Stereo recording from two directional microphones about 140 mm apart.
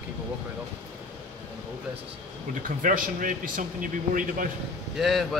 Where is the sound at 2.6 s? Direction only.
85° right.